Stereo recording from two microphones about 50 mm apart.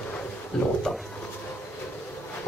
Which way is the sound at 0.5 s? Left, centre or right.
Centre.